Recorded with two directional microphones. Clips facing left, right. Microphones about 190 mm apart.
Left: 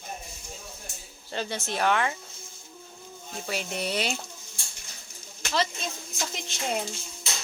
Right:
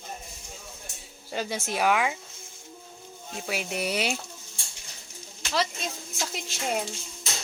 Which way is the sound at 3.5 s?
5° right (ahead or behind).